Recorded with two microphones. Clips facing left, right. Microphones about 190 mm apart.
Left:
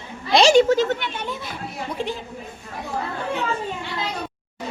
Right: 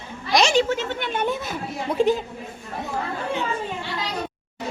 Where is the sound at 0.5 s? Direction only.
45° left (ahead or behind).